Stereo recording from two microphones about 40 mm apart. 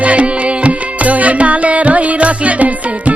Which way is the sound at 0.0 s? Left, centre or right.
Right.